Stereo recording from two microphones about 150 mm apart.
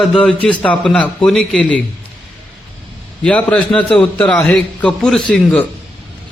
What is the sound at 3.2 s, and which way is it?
A man's voice, 10° left (ahead or behind).